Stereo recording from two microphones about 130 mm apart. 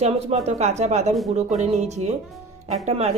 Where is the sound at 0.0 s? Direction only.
55° right (ahead or behind).